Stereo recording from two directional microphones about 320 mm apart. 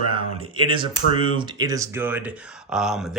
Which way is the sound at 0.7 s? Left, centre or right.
Centre.